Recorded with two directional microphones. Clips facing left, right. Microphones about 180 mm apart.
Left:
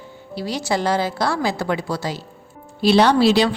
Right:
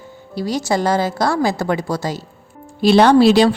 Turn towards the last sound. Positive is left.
turn(degrees=-50)  # may be behind; listen again after turning